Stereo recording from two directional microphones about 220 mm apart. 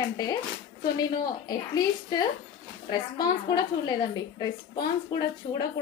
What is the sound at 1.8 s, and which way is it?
A woman's voice, 15° left (ahead or behind).